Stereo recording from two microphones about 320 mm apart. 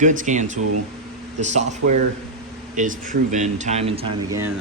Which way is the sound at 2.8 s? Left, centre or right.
Right.